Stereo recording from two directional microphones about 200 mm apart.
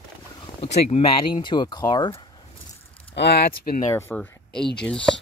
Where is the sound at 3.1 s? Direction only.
55° left (ahead or behind).